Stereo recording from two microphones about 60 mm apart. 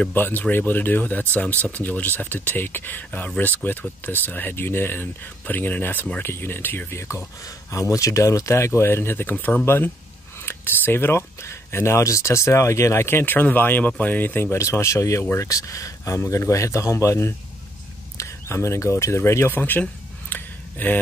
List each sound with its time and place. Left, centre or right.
0.1 s speech: left
7.0 s speech: left
7.8 s speech: left
9.3 s speech: left
10.4 s speech: left
14.6 s speech: left
15.3 s speech: left
19.5 s a sound: left